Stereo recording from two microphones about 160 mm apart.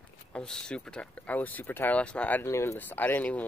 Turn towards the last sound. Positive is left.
turn(degrees=10)  # may be behind; listen again after turning